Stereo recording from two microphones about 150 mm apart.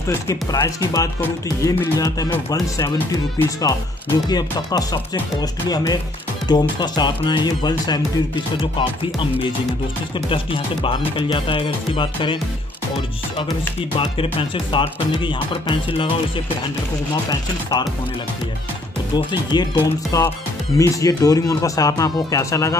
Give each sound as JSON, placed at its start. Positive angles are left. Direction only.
{"t": 0.3, "sound": "speech", "side_deg": 20}
{"t": 10.1, "sound": "speech", "side_deg": 35}
{"t": 13.4, "sound": "speech", "side_deg": 35}
{"t": 17.1, "sound": "speech", "side_deg": 25}
{"t": 19.1, "sound": "speech", "side_deg": 30}